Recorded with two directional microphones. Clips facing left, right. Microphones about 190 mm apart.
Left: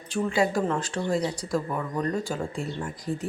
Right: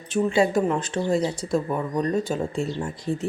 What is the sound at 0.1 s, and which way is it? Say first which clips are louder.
Speech: right 4 dB; 20° right (ahead or behind).